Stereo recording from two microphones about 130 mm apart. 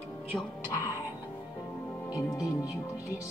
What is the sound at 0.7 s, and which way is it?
Speech, 25° left (ahead or behind).